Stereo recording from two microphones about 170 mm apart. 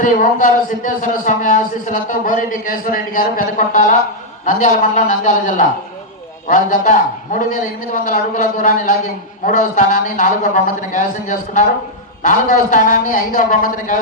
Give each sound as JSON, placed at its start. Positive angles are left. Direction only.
{"t": 0.0, "sound": "a man's voice", "side_deg": 50}